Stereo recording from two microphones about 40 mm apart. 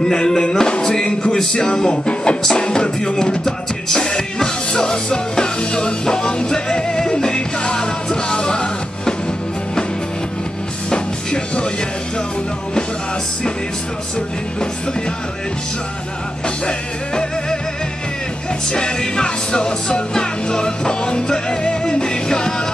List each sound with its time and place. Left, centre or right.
0.0 s music: centre
10.9 s music: left
16.4 s music: left
18.7 s music: left